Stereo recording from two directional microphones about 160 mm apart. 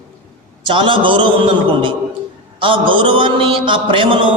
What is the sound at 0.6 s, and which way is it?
A man's voice, 30° right (ahead or behind).